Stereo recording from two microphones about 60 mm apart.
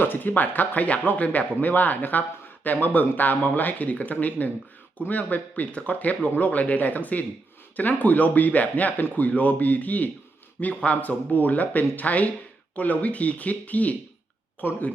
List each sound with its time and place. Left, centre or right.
0.0 s speech: left